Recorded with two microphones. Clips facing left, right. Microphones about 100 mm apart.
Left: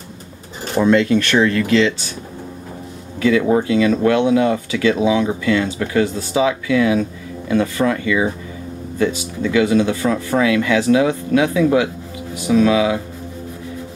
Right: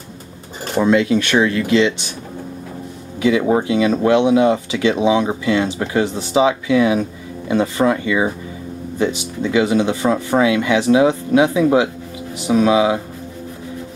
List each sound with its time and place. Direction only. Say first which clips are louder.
0.7 s speech: left 1 dB; 5° right (ahead or behind)
3.2 s speech: even; 20° right (ahead or behind)